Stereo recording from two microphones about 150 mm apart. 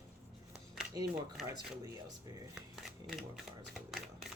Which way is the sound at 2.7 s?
Centre (ahead or behind).